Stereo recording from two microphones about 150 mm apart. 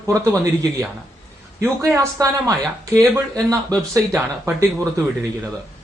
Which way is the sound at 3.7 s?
Centre (ahead or behind).